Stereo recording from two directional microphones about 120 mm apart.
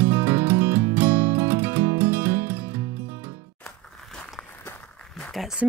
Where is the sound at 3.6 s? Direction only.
5° left (ahead or behind).